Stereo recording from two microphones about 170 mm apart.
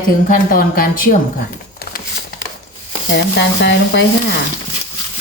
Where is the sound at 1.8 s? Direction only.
65° left (ahead or behind).